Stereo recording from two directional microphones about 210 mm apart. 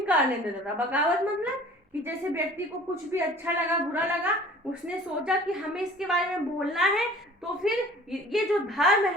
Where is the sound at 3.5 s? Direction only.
10° right (ahead or behind).